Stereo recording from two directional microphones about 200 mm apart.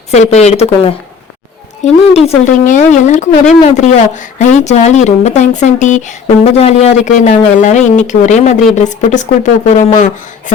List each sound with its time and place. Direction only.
0.1 s speech: 35° left (ahead or behind)